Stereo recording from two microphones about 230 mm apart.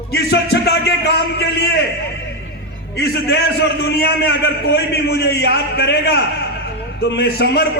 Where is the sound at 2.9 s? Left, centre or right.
Left.